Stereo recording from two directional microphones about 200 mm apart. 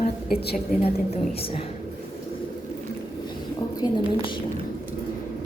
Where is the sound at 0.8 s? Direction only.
30° left (ahead or behind).